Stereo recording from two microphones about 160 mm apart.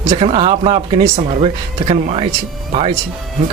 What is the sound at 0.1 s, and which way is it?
Speech, 35° right (ahead or behind).